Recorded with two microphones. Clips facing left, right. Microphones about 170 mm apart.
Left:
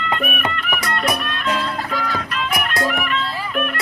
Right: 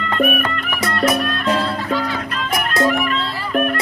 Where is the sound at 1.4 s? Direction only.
35° right (ahead or behind).